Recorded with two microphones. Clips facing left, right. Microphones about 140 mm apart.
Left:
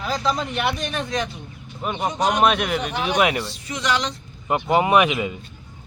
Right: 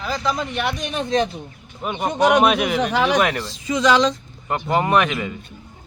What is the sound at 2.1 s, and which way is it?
Speech, 65° right (ahead or behind).